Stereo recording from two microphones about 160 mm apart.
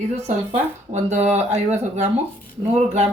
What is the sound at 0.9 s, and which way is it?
Speech, 45° right (ahead or behind).